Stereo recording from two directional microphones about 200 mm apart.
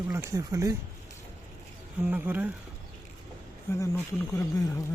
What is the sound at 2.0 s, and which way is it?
Speech, 10° right (ahead or behind).